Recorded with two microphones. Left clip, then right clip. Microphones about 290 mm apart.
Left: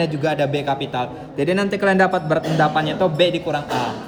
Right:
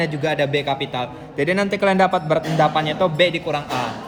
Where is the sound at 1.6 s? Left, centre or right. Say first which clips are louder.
Left 1 dB; centre.